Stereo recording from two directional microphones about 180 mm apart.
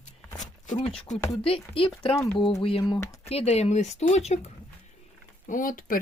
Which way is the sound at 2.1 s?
15° left (ahead or behind).